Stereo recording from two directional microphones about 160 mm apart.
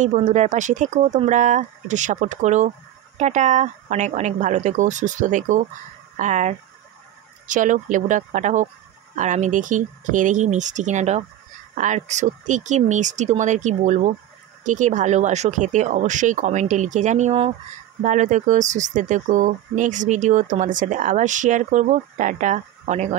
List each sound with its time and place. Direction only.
0.0 s speech: 50° right (ahead or behind)